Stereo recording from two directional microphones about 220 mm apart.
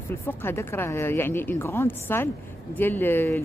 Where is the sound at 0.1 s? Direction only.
10° left (ahead or behind).